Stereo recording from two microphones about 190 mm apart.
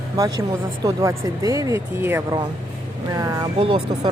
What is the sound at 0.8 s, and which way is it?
Speech, 15° right (ahead or behind).